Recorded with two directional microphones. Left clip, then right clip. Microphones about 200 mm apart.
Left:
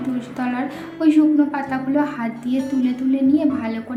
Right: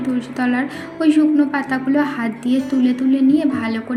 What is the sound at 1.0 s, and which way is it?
A woman's voice, 15° right (ahead or behind).